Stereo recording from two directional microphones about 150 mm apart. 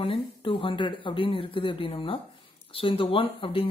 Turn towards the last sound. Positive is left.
turn(degrees=35)  # may be behind; listen again after turning